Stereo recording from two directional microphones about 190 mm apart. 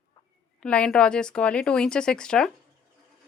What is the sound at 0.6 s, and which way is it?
Speech, 5° left (ahead or behind).